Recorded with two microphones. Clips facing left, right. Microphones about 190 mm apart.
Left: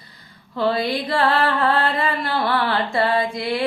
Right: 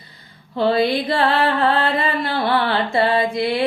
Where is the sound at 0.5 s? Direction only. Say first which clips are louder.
Right 4 dB; 25° right (ahead or behind).